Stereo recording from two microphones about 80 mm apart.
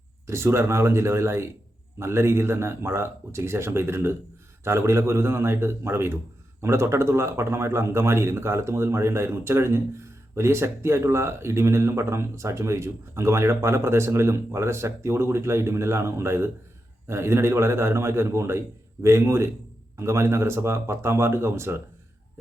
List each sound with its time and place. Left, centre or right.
0.3 s a man's voice: right